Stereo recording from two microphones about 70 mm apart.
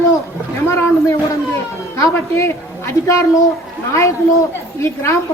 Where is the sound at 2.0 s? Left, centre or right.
Left.